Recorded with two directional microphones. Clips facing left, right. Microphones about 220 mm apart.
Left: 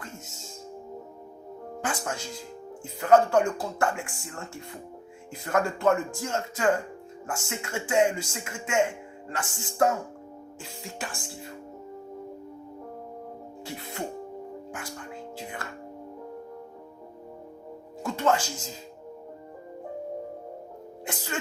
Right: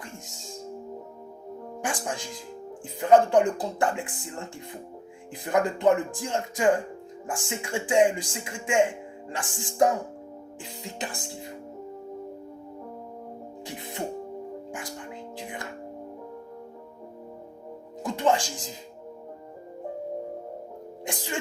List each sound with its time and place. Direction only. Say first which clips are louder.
0.0 s music: even; 15° right (ahead or behind)
1.8 s speech: even; 15° right (ahead or behind)
13.7 s speech: left 1 dB; 15° right (ahead or behind)
14.7 s music: right 1 dB; 15° right (ahead or behind)
18.0 s music: right 1 dB; 15° right (ahead or behind)
21.0 s sneeze: right 2 dB; 15° right (ahead or behind)